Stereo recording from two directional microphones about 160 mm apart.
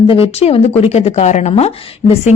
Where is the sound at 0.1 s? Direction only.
35° left (ahead or behind).